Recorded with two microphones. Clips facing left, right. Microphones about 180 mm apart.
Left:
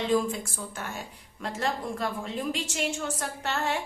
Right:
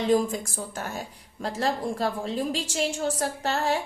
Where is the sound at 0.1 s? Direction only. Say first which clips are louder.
Right 4 dB; 40° right (ahead or behind).